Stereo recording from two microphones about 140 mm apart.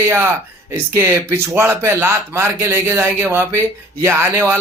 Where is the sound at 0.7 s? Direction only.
20° right (ahead or behind).